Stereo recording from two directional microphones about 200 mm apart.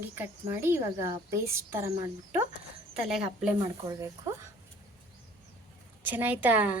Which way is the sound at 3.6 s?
20° right (ahead or behind).